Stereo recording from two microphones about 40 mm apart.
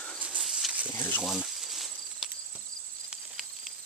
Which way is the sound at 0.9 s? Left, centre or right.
Left.